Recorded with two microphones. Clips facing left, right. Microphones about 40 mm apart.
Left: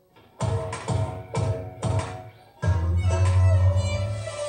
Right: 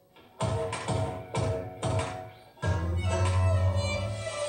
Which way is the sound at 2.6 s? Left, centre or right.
Right.